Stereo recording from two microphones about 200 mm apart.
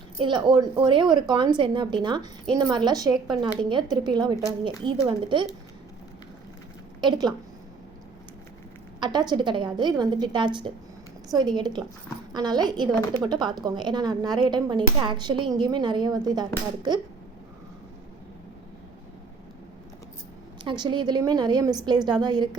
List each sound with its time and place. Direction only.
0.2 s speech: 25° right (ahead or behind)
7.0 s speech: 20° right (ahead or behind)
9.0 s speech: 20° right (ahead or behind)
20.7 s speech: 20° right (ahead or behind)